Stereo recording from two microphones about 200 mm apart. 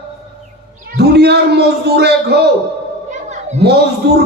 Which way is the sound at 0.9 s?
55° right (ahead or behind).